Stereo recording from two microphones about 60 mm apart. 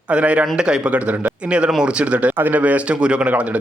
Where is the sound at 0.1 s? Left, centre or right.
Right.